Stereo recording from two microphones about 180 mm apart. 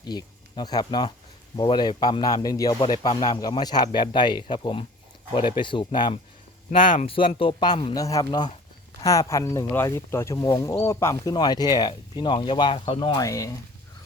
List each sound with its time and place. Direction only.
0.0 s speech: 25° left (ahead or behind)
6.7 s speech: 45° left (ahead or behind)
7.1 s speech: 30° left (ahead or behind)